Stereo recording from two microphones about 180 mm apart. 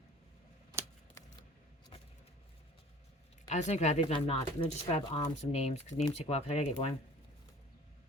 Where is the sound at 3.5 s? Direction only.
40° left (ahead or behind).